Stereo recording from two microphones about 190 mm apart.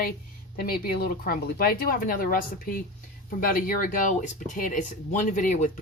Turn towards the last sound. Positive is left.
turn(degrees=40)  # may be behind; listen again after turning